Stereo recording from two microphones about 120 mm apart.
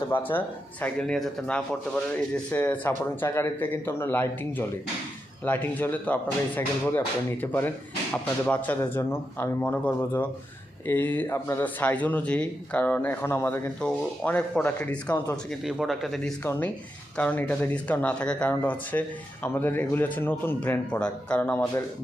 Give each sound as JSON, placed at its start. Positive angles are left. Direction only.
{"t": 0.3, "sound": "speech", "side_deg": 15}
{"t": 15.4, "sound": "speech", "side_deg": 0}
{"t": 16.4, "sound": "speech", "side_deg": 15}